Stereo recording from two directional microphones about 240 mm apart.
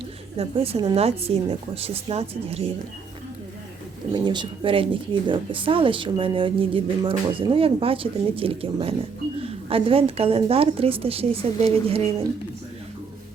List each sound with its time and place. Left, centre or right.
0.3 s speech: right
4.1 s speech: centre